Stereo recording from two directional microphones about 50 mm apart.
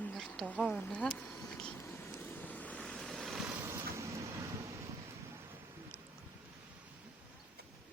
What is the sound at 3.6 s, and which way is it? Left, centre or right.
Vehicle, right.